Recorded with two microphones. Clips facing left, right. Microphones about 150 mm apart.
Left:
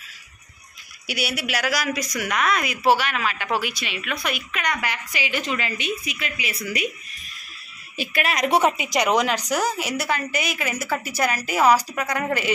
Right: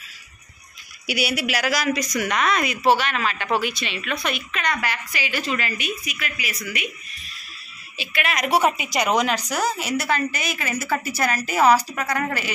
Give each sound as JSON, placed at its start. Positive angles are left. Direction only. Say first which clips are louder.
{"t": 1.0, "sound": "a woman's voice", "louder": "right 3 dB", "side_deg": -5}
{"t": 8.0, "sound": "a woman's voice", "louder": "left 2 dB", "side_deg": 40}
{"t": 8.7, "sound": "a woman's voice", "louder": "left 1 dB", "side_deg": 15}